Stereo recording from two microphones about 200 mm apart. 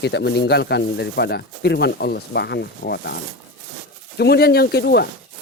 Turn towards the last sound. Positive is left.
turn(degrees=55)  # may be behind; listen again after turning